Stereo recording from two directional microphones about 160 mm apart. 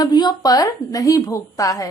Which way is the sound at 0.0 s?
25° left (ahead or behind).